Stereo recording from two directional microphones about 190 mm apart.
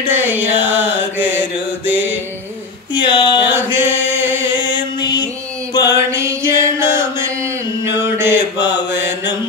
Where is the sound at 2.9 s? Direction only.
25° left (ahead or behind).